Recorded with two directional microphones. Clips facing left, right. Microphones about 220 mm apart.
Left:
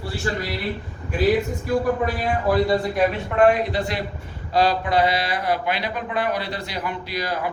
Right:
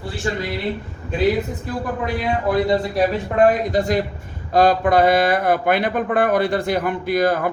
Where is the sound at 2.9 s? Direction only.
40° right (ahead or behind).